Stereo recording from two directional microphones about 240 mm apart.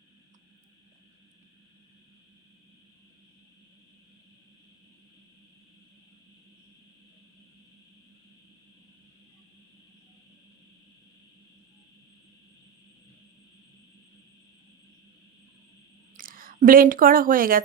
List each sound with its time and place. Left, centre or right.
16.1 s speech: right